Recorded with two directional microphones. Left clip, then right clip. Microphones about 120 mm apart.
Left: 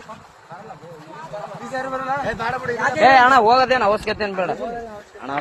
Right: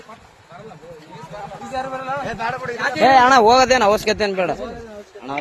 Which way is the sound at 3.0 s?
50° right (ahead or behind).